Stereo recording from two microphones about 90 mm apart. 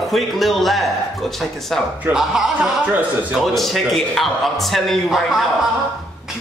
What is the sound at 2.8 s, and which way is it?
Speech, 15° right (ahead or behind).